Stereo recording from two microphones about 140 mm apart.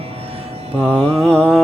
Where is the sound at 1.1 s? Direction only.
Centre (ahead or behind).